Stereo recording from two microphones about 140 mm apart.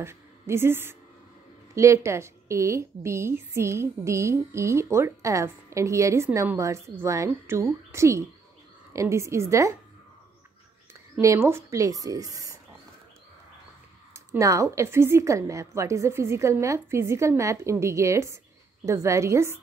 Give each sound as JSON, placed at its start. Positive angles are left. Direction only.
{"t": 0.0, "sound": "a woman's voice", "side_deg": -20}
{"t": 11.1, "sound": "a woman's voice", "side_deg": -20}
{"t": 14.1, "sound": "a woman's voice", "side_deg": -20}